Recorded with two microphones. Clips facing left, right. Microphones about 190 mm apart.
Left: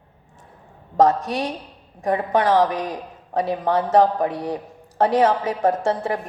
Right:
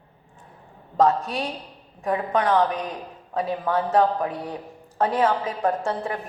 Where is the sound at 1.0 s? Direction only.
90° left.